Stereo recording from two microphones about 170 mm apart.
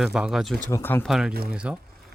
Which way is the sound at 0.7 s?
15° left (ahead or behind).